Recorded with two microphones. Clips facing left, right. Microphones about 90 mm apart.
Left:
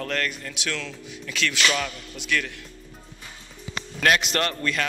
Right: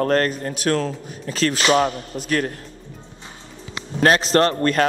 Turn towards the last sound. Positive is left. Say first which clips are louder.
# right 9 dB
turn(degrees=-45)  # may be behind; listen again after turning